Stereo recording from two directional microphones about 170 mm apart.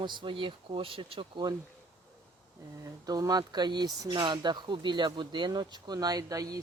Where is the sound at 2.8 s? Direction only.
20° right (ahead or behind).